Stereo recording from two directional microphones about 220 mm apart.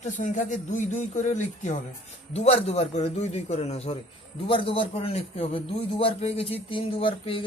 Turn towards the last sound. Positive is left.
turn(degrees=25)  # may be behind; listen again after turning